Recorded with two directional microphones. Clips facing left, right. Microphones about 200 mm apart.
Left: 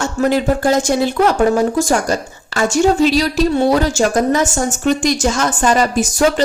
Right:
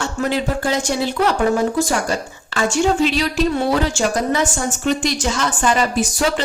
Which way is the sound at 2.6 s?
40° left (ahead or behind).